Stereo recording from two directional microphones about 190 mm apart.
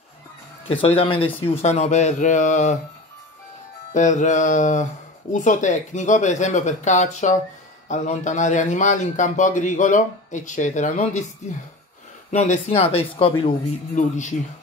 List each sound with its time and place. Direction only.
0.7 s a man's voice: 30° left (ahead or behind)
3.9 s a man's voice: 40° left (ahead or behind)
12.3 s a man's voice: 35° left (ahead or behind)